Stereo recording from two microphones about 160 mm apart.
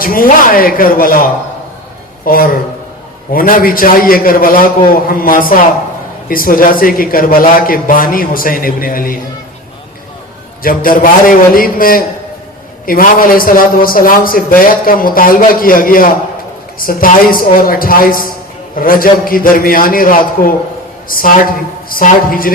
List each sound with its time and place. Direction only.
0.0 s a man's voice: 65° left (ahead or behind)
10.6 s a man's voice: 60° left (ahead or behind)